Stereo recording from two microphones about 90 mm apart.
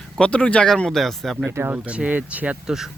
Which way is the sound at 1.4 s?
25° right (ahead or behind).